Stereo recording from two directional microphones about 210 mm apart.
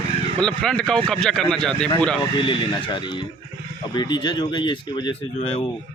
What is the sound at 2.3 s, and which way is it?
A man's voice, 20° left (ahead or behind).